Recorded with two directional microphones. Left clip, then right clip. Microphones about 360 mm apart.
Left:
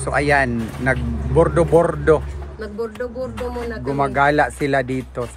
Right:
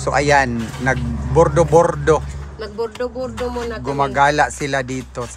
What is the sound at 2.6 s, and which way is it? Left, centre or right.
Speech, centre.